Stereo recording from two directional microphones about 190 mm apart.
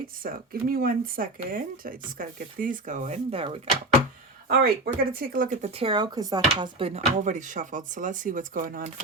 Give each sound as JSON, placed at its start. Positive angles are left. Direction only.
{"t": 0.2, "sound": "speech", "side_deg": -50}
{"t": 4.4, "sound": "speech", "side_deg": -55}
{"t": 7.1, "sound": "speech", "side_deg": -40}